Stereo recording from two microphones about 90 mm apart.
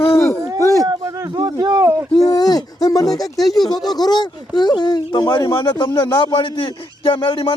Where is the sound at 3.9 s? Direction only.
50° left (ahead or behind).